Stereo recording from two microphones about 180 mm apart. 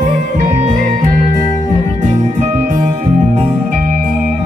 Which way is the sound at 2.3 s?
50° right (ahead or behind).